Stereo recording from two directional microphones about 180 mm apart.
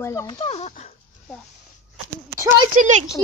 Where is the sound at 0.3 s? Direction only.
30° left (ahead or behind).